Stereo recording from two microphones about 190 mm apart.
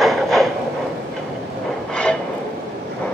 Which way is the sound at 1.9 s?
5° left (ahead or behind).